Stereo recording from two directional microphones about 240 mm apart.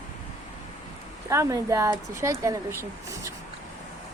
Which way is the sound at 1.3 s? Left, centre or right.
Centre.